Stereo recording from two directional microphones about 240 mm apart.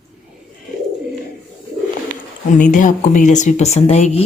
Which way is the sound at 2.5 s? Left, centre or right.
Left.